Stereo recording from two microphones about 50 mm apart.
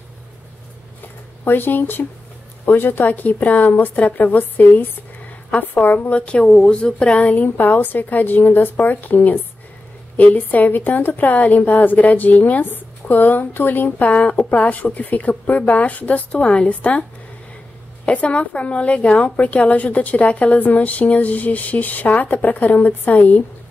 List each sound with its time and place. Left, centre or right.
1.0 s a sound: left
2.6 s a woman's voice: left
18.0 s a woman's voice: left